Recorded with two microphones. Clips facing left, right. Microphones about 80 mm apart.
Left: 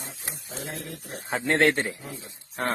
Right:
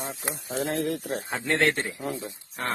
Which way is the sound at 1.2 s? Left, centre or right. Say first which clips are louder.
Left 3 dB; left.